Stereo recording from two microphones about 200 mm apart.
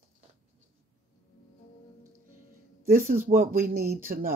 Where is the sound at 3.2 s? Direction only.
45° right (ahead or behind).